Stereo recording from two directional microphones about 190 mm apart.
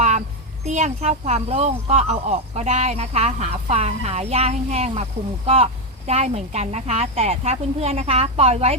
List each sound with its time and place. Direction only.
0.6 s speech: 35° right (ahead or behind)
6.1 s speech: 35° right (ahead or behind)